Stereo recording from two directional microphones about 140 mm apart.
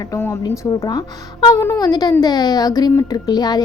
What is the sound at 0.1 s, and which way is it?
Speech, 20° left (ahead or behind).